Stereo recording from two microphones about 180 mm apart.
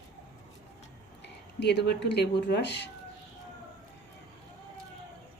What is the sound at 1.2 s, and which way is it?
Speech, 70° left (ahead or behind).